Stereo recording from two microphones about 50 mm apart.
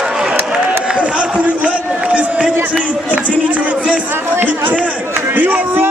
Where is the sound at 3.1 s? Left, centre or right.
Right.